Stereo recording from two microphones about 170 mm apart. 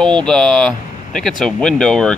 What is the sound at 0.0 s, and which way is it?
Speech, 5° left (ahead or behind).